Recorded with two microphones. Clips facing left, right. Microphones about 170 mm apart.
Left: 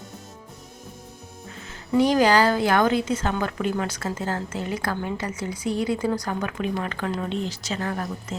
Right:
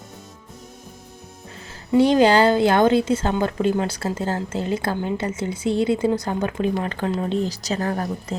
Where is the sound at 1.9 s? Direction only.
25° right (ahead or behind).